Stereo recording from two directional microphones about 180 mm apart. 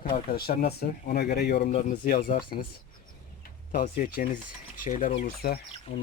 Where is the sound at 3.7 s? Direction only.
55° left (ahead or behind).